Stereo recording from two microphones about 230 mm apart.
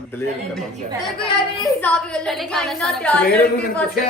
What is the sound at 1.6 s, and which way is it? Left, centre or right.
A woman's voice, centre.